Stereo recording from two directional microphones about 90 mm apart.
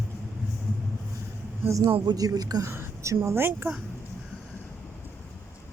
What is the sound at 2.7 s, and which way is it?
Speech, 30° right (ahead or behind).